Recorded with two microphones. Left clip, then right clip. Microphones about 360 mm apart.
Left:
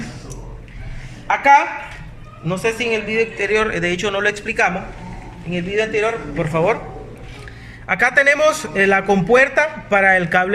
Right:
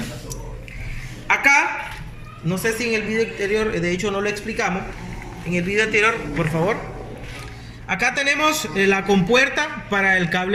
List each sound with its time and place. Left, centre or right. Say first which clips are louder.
1.3 s a sound: left 4 dB; left
2.5 s a man's voice: left 3 dB; left
7.9 s a man's voice: left 6 dB; left